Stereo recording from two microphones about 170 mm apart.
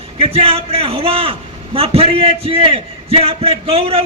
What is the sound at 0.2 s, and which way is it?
A man's voice, 35° right (ahead or behind).